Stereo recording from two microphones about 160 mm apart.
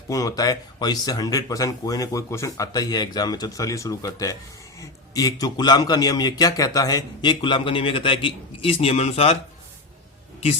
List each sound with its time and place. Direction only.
0.1 s a man's voice: 20° left (ahead or behind); by 9.4 s 40° left (ahead or behind)